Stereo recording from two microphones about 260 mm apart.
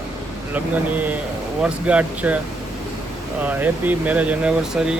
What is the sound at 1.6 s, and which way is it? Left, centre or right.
Speech, centre.